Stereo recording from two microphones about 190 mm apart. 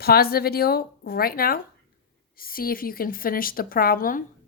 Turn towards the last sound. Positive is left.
turn(degrees=45)  # may be behind; listen again after turning